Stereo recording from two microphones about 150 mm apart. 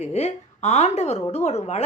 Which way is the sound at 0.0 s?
45° left (ahead or behind).